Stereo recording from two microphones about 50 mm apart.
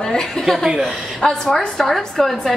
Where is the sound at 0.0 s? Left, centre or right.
Centre.